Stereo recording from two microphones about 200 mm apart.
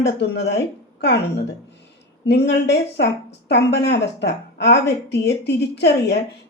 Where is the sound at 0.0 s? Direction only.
60° left (ahead or behind).